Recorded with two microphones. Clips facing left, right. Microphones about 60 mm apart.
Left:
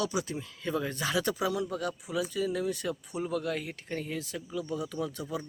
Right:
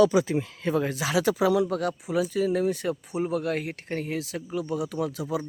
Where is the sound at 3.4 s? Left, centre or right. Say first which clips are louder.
Right 5 dB; right.